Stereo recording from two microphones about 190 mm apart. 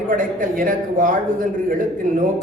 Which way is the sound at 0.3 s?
45° right (ahead or behind).